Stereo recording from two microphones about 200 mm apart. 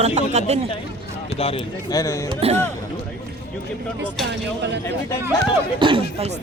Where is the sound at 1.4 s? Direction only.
30° left (ahead or behind).